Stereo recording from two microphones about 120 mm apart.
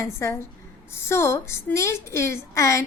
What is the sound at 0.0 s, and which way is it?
A woman's voice, 25° left (ahead or behind).